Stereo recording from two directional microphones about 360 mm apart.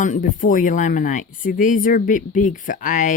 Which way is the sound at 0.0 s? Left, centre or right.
Left.